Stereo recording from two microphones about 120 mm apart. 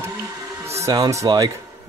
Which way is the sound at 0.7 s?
25° right (ahead or behind).